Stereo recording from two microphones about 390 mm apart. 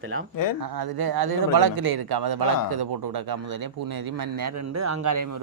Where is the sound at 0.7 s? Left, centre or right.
Right.